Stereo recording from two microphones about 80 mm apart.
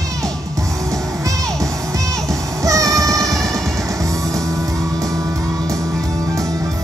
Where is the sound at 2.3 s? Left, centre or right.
Right.